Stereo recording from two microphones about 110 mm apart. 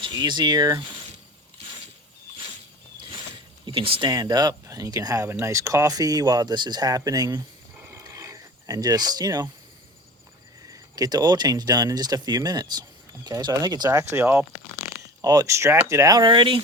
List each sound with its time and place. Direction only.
0.1 s speech: 40° right (ahead or behind)
3.7 s speech: 50° right (ahead or behind)
4.1 s speech: 40° right (ahead or behind)
7.9 s a sound: 30° right (ahead or behind)
10.7 s speech: 35° right (ahead or behind)
14.0 s speech: 25° right (ahead or behind); by 16.6 s 50° right (ahead or behind)